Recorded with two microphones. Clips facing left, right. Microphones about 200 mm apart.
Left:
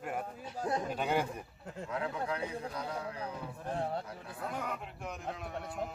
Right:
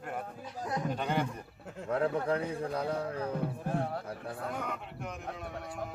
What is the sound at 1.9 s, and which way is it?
A man's voice, 50° right (ahead or behind).